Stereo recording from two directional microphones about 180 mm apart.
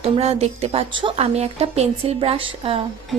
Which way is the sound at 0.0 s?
35° right (ahead or behind).